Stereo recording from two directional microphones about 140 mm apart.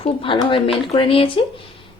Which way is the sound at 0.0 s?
40° left (ahead or behind).